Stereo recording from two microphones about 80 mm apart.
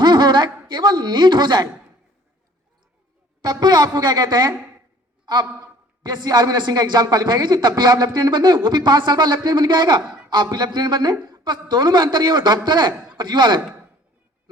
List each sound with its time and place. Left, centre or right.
0.0 s speech: right
3.4 s speech: right
5.2 s a sound: right
6.0 s speech: right